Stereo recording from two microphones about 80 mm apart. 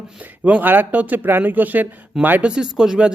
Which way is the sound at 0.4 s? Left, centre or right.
Right.